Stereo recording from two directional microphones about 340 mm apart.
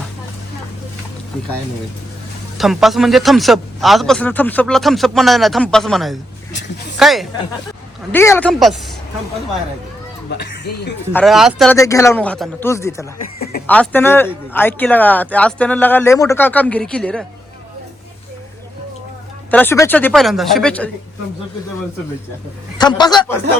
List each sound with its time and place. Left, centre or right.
2.6 s a man's voice: centre
10.2 s speech: left
11.1 s a man's voice: centre
19.5 s a man's voice: centre
22.8 s a man's voice: centre